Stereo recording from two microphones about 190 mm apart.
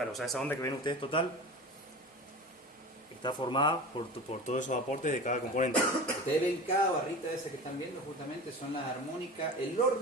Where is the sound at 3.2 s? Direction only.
25° left (ahead or behind).